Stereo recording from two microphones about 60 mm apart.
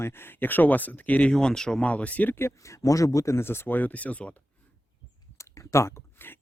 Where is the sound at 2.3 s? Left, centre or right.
Left.